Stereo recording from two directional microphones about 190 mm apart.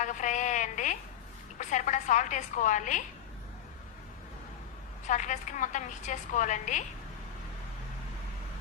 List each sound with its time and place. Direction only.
0.0 s a woman's voice: 40° left (ahead or behind)
5.0 s a woman's voice: 40° left (ahead or behind)